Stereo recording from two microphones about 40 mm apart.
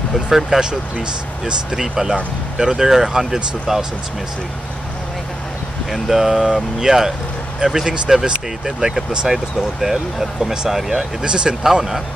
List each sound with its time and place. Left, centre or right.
0.5 s speech: centre
5.9 s speech: centre
11.2 s speech: right
11.6 s speech: centre